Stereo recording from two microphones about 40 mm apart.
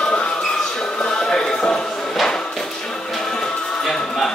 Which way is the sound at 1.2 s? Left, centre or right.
Centre.